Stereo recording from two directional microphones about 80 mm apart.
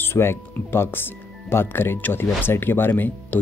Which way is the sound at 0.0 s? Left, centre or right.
Left.